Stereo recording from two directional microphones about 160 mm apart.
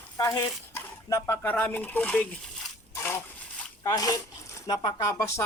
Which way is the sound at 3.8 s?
20° left (ahead or behind).